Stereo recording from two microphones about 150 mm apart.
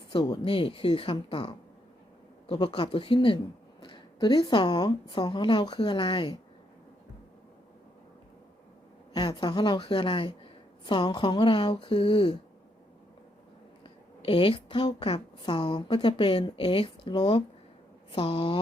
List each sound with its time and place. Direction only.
0.1 s speech: 30° left (ahead or behind)
9.1 s speech: 30° left (ahead or behind)
13.8 s speech: 35° left (ahead or behind)